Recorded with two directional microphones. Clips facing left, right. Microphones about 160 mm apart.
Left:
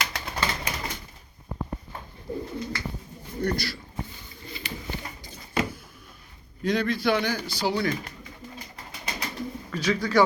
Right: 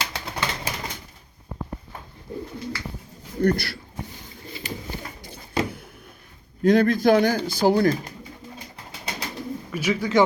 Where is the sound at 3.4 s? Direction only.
55° right (ahead or behind).